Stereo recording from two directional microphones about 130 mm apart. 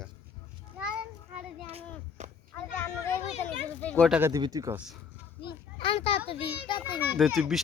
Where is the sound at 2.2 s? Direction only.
65° right (ahead or behind).